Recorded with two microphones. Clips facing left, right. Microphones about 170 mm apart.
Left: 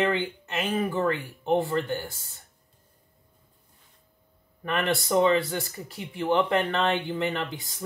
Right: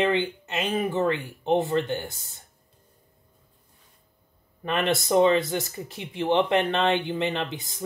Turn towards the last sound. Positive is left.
turn(degrees=-20)  # may be behind; listen again after turning